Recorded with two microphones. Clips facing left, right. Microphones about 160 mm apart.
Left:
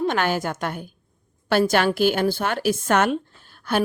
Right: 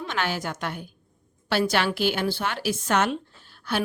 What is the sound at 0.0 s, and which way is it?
A woman's voice, 50° left (ahead or behind).